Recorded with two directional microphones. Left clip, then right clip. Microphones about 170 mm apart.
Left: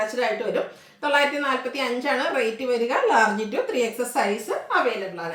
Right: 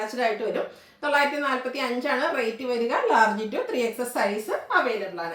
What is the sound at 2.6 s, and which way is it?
Speech, 20° left (ahead or behind).